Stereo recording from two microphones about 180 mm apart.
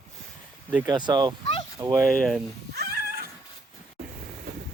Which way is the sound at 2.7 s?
60° right (ahead or behind).